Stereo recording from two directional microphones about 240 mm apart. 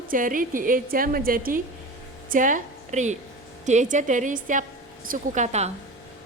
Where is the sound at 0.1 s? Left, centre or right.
Right.